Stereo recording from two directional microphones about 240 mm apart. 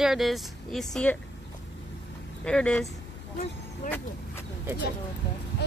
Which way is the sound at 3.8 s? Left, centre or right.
Left.